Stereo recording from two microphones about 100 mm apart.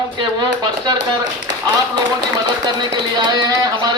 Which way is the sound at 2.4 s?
45° right (ahead or behind).